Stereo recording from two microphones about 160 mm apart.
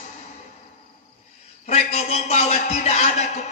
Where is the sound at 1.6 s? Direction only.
45° left (ahead or behind).